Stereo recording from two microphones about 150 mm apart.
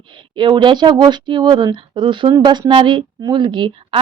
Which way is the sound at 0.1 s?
35° right (ahead or behind).